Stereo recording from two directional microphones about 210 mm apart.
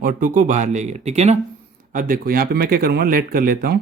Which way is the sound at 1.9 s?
40° right (ahead or behind).